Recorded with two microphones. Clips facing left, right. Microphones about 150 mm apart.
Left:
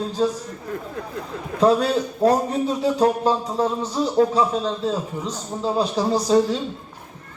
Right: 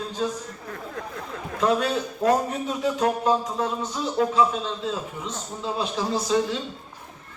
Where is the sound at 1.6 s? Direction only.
35° left (ahead or behind).